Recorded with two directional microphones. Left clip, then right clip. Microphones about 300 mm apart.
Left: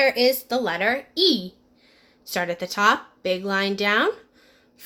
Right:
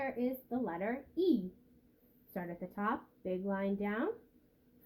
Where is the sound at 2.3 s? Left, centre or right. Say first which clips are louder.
Left 18 dB; left.